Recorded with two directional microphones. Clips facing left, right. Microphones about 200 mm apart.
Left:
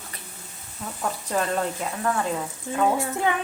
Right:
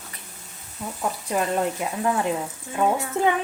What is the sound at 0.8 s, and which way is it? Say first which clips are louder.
Speech: right 2 dB; 5° right (ahead or behind).